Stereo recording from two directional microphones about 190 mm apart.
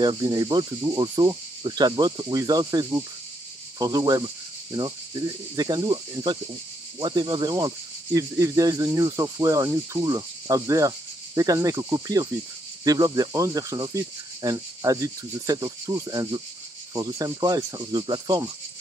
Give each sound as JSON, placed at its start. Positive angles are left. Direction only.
{"t": 0.0, "sound": "speech", "side_deg": -20}